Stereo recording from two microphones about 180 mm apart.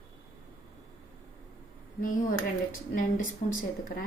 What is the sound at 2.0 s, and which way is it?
Speech, 45° left (ahead or behind).